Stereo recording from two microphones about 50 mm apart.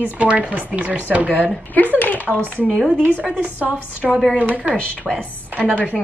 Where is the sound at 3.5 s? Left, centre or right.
Right.